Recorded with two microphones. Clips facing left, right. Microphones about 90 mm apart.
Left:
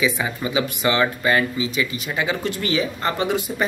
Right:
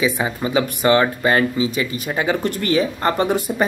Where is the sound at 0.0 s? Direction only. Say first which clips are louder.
Right 2 dB; 35° right (ahead or behind).